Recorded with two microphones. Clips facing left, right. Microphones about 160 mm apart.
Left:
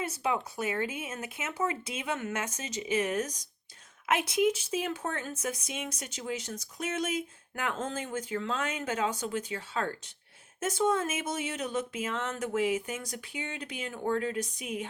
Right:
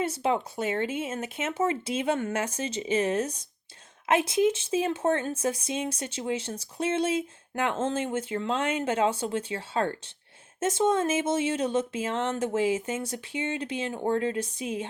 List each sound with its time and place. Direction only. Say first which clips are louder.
0.0 s speech: right 5 dB; 30° right (ahead or behind)